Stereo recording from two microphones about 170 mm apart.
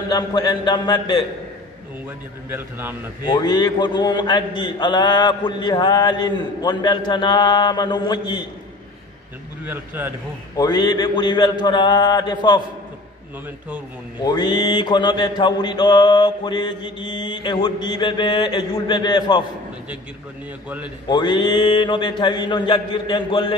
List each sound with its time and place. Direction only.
0.1 s a man's voice: 25° left (ahead or behind)
2.5 s a man's voice: 15° right (ahead or behind)
3.3 s a man's voice: 25° left (ahead or behind)
9.7 s a man's voice: 10° right (ahead or behind)
10.6 s a man's voice: 25° left (ahead or behind)
14.2 s a man's voice: 25° left (ahead or behind)
21.1 s a man's voice: 25° left (ahead or behind)